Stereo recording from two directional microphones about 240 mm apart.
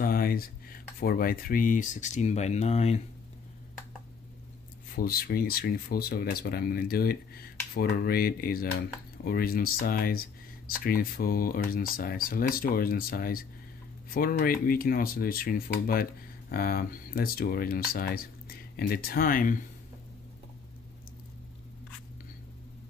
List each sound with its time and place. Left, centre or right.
0.0 s a sound: left
0.9 s speech: left
4.9 s speech: left